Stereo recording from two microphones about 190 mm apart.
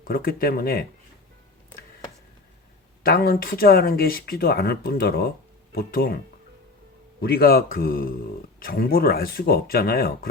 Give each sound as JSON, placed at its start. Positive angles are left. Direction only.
{"t": 0.0, "sound": "speech", "side_deg": 50}
{"t": 3.0, "sound": "speech", "side_deg": 50}
{"t": 7.2, "sound": "speech", "side_deg": 55}